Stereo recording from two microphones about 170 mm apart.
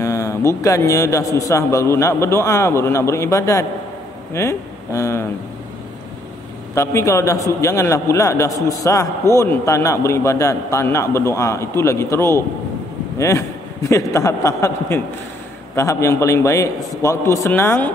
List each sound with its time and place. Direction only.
0.0 s a man's voice: 20° left (ahead or behind)
6.7 s a man's voice: 15° left (ahead or behind)